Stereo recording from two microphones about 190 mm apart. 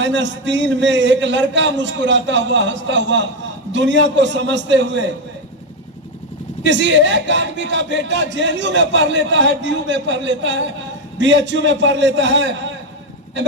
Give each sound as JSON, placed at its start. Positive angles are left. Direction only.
{"t": 0.0, "sound": "a man's voice", "side_deg": -70}
{"t": 6.6, "sound": "a man's voice", "side_deg": -70}